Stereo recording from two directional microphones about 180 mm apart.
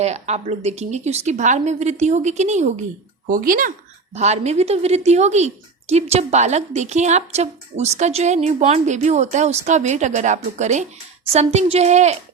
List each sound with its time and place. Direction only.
0.0 s a woman's voice: 40° right (ahead or behind)
3.2 s speech: 50° right (ahead or behind)
4.1 s a woman's voice: 40° right (ahead or behind)